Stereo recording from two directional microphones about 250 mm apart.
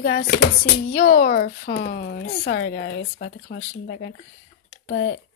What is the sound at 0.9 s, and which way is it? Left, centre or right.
A woman's voice, left.